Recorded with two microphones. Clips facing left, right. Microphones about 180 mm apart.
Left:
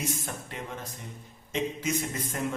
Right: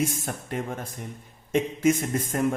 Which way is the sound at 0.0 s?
50° right (ahead or behind).